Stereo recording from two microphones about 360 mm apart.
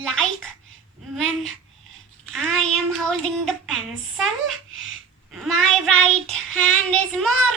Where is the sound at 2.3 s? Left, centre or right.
Centre.